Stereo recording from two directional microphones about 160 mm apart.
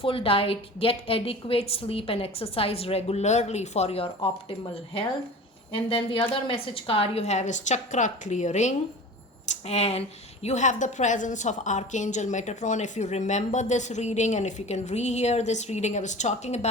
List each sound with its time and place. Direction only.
0.0 s a woman's voice: 35° left (ahead or behind)